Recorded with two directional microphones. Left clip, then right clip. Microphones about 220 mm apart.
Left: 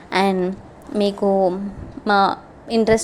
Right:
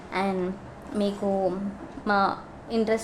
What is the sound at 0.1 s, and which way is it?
A woman's voice, 30° left (ahead or behind).